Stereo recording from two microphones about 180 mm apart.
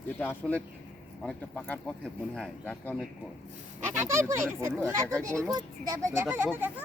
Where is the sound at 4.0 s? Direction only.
15° right (ahead or behind).